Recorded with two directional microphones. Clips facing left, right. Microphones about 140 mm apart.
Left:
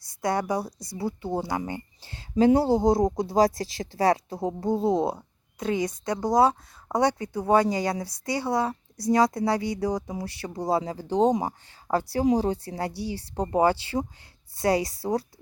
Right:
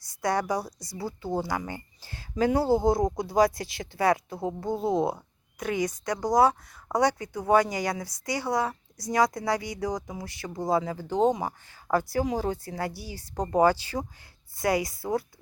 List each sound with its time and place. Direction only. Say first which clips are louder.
0.0 s a woman's voice: left 1 dB; 25° left (ahead or behind)